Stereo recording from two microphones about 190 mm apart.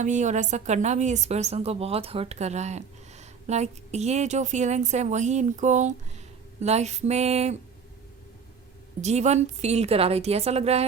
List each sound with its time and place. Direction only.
0.0 s a woman's voice: 40° right (ahead or behind)
9.0 s a woman's voice: 35° right (ahead or behind)